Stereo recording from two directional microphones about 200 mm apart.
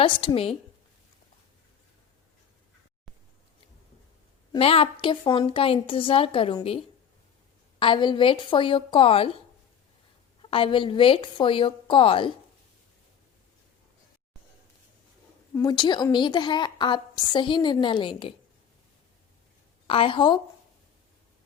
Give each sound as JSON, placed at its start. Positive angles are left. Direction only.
{"t": 0.0, "sound": "a woman's voice", "side_deg": 25}
{"t": 4.5, "sound": "a woman's voice", "side_deg": 30}
{"t": 10.4, "sound": "a woman's voice", "side_deg": 25}
{"t": 15.5, "sound": "a woman's voice", "side_deg": 20}
{"t": 19.9, "sound": "a woman's voice", "side_deg": 25}